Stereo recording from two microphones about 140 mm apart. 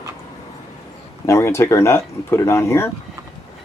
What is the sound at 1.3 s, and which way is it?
Speech, 20° left (ahead or behind).